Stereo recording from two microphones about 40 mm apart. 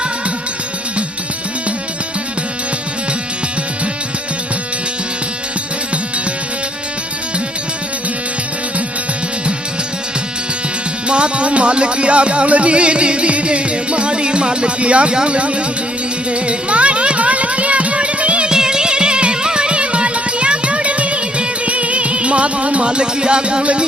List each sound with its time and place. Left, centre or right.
11.1 s speech: right
16.3 s music: right
18.4 s music: centre